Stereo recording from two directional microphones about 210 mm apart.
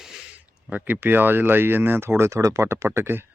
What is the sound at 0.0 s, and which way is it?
Speech, 5° right (ahead or behind).